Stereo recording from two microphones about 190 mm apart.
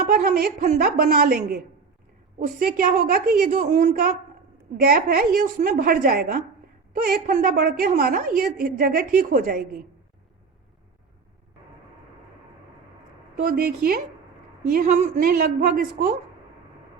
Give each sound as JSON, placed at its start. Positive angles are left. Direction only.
{"t": 0.0, "sound": "a woman's voice", "side_deg": -50}
{"t": 4.8, "sound": "a woman's voice", "side_deg": -50}
{"t": 13.3, "sound": "a woman's voice", "side_deg": -45}
{"t": 15.7, "sound": "a woman's voice", "side_deg": -50}